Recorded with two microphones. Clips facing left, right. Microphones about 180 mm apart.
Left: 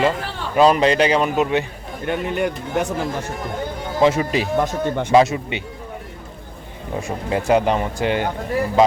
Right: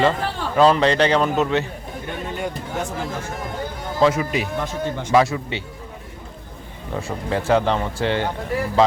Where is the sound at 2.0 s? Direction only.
70° left (ahead or behind).